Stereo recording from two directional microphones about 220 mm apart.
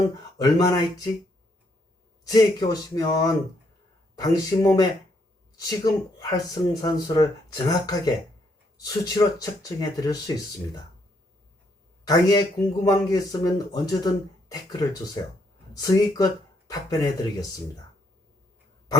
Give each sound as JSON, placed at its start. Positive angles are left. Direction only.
{"t": 0.4, "sound": "speech", "side_deg": 15}
{"t": 2.3, "sound": "speech", "side_deg": 15}
{"t": 12.0, "sound": "speech", "side_deg": 15}